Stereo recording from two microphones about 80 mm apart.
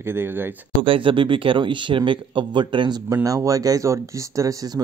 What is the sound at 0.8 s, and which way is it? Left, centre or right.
Speech, right.